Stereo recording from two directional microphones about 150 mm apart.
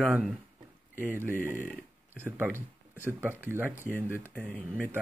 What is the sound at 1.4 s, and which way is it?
Speech, 15° right (ahead or behind).